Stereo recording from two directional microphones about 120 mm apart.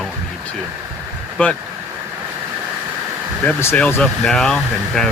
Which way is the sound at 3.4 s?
15° left (ahead or behind).